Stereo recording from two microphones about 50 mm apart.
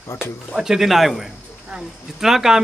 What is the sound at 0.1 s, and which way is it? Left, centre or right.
Speech, left.